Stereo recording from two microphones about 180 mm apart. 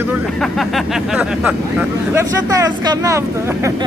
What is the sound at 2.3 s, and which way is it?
Speech, 20° right (ahead or behind).